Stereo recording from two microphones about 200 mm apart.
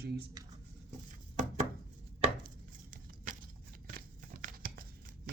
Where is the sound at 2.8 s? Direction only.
40° right (ahead or behind).